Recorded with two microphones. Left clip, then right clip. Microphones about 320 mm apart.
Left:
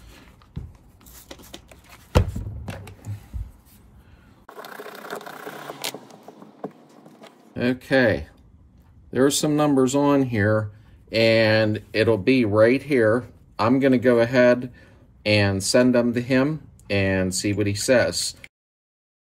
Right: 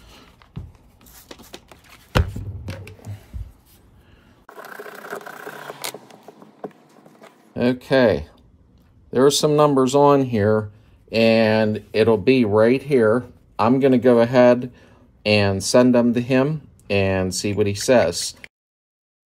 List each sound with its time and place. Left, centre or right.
1.0 s a sound: centre
4.5 s vehicle: centre
7.5 s speech: centre
9.8 s speech: centre